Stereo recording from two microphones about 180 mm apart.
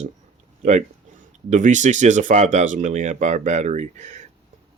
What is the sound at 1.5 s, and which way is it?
Speech, 40° right (ahead or behind).